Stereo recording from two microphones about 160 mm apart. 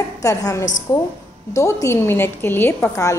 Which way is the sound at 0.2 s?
20° left (ahead or behind).